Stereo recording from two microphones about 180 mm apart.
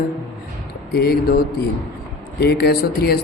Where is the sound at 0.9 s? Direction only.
60° left (ahead or behind).